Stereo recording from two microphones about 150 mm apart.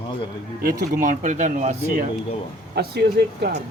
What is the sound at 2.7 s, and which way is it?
Speech, 90° right.